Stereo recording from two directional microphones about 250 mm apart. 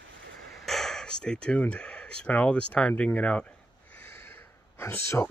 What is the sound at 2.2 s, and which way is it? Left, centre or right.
Speech, centre.